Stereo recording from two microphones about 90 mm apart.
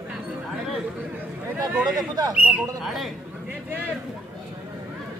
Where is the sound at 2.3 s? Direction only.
15° right (ahead or behind).